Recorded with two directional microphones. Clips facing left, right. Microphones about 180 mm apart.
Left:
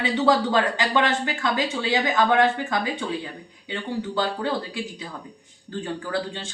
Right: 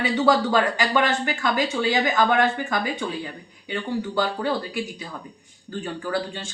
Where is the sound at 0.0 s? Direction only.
25° left (ahead or behind).